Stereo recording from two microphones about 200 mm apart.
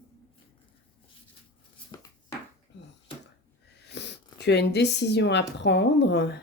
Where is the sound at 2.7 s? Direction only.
60° left (ahead or behind).